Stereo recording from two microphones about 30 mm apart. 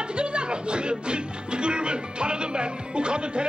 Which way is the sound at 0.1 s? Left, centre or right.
Right.